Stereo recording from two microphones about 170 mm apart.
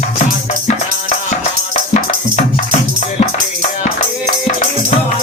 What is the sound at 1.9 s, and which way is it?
Music, 45° left (ahead or behind).